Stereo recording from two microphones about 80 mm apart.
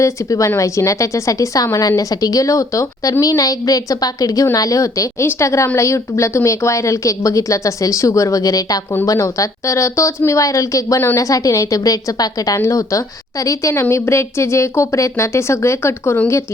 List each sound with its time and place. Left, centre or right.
0.0 s a woman's voice: left